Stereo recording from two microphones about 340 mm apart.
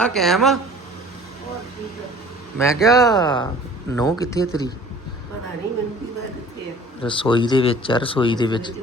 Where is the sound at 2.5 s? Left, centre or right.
Centre.